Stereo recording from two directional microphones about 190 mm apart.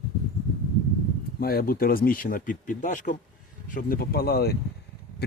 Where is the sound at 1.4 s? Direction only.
50° left (ahead or behind).